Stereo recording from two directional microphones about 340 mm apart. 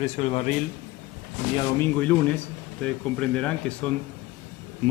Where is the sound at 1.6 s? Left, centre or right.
Centre.